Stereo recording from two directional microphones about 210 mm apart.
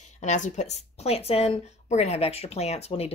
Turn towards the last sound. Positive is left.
turn(degrees=30)  # may be behind; listen again after turning